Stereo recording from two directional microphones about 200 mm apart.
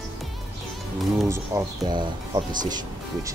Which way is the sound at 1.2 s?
15° right (ahead or behind).